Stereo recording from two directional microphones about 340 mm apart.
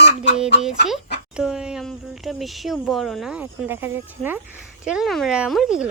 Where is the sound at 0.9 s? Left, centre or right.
Centre.